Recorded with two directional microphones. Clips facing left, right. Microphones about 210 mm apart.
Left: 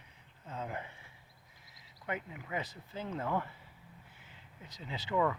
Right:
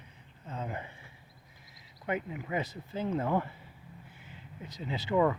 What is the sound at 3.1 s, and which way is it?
Speech, 25° right (ahead or behind).